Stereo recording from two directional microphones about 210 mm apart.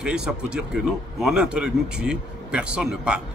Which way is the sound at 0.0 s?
5° right (ahead or behind).